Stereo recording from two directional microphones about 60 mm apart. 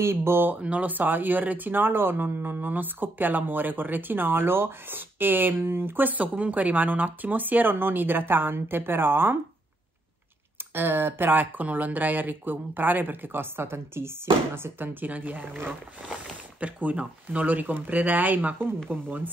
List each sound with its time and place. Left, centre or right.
0.0 s speech: right
0.6 s speech: right
10.7 s speech: right